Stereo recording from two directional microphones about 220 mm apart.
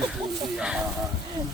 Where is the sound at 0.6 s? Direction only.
5° right (ahead or behind).